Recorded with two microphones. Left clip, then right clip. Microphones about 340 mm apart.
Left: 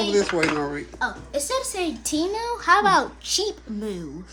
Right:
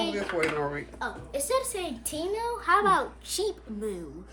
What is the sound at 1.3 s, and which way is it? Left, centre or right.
Speech, left.